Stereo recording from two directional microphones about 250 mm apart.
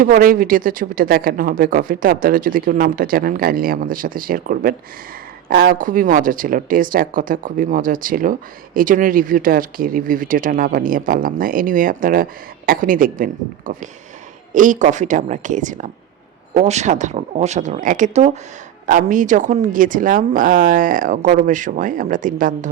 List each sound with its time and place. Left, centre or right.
0.0 s speech: right